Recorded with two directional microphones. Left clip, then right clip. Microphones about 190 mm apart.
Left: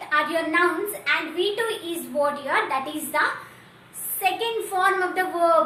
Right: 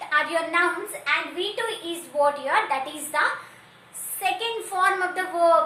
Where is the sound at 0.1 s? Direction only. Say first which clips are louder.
Left 1 dB; 20° right (ahead or behind).